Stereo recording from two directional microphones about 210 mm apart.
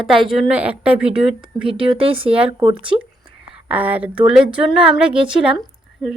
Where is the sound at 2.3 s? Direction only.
5° right (ahead or behind).